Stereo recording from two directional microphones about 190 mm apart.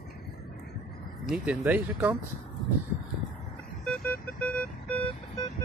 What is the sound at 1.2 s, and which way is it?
Speech, 5° right (ahead or behind).